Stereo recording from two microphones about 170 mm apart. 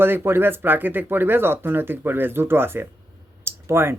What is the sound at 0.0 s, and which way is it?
Speech, 15° right (ahead or behind).